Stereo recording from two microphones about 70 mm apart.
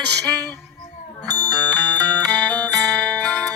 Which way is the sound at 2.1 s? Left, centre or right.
Right.